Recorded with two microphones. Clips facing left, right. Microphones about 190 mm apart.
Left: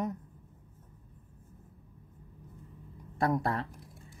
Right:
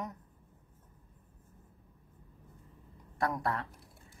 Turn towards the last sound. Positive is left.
turn(degrees=25)  # may be behind; listen again after turning